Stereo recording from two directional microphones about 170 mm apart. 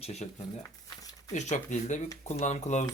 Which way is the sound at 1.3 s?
45° left (ahead or behind).